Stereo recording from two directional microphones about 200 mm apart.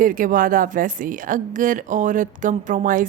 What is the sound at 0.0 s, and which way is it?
A woman's voice, 45° right (ahead or behind).